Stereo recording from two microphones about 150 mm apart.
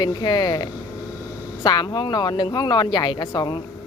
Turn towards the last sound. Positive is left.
turn(degrees=30)  # may be behind; listen again after turning